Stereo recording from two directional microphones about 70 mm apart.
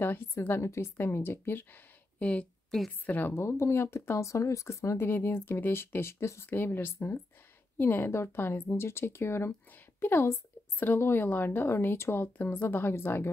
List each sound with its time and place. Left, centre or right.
0.5 s speech: left
2.1 s a woman's voice: centre
3.1 s a woman's voice: left